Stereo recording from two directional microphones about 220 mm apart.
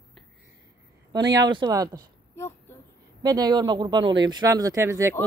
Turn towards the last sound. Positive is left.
turn(degrees=-10)  # may be behind; listen again after turning